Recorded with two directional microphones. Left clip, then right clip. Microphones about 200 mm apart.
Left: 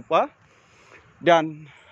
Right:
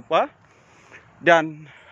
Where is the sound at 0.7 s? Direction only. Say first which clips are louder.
Right 3 dB; 5° left (ahead or behind).